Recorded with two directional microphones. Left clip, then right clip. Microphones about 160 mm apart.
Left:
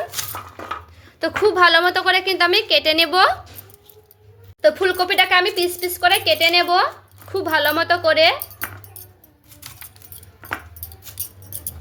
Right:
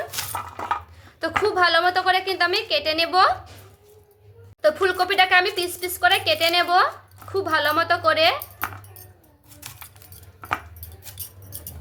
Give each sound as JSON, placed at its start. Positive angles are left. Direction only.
{"t": 1.0, "sound": "a woman's voice", "side_deg": 30}
{"t": 4.6, "sound": "speech", "side_deg": 25}